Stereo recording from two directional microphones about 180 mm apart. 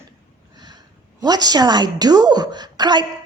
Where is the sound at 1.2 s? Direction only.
20° right (ahead or behind).